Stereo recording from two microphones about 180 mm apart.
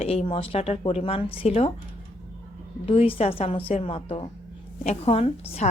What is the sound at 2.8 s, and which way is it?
A woman's voice, 30° left (ahead or behind).